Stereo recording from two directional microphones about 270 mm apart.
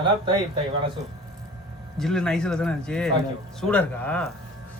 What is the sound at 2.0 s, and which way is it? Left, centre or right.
Speech, centre.